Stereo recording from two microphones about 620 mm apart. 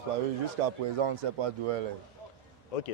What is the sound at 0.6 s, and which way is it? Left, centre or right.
Speech, right.